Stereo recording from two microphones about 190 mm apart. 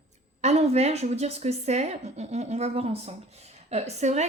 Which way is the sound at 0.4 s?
35° right (ahead or behind).